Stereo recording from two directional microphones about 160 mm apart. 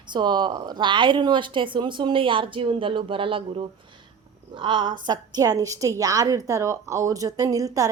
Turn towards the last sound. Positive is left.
turn(degrees=-20)  # may be behind; listen again after turning